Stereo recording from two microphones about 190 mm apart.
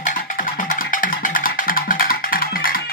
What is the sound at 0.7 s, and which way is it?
Music, 45° left (ahead or behind).